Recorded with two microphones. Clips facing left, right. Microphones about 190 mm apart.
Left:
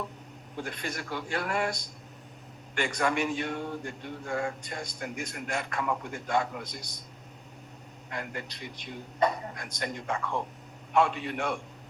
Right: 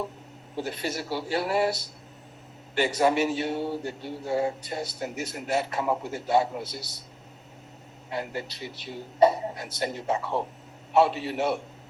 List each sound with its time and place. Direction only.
0.6 s a man's voice: 5° right (ahead or behind)
3.5 s male singing: 35° right (ahead or behind)
4.2 s a man's voice: 5° right (ahead or behind)
8.1 s a man's voice: 5° right (ahead or behind)